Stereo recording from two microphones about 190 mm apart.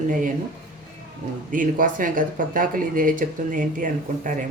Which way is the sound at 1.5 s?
45° right (ahead or behind).